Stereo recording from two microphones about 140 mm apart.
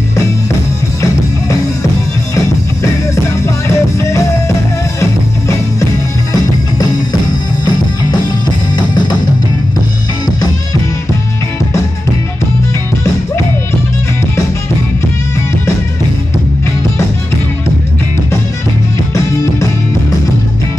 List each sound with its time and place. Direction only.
3.4 s music: 20° left (ahead or behind)
6.3 s music: 30° left (ahead or behind)